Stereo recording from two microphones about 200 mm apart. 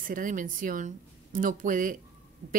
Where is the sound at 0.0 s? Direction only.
45° right (ahead or behind).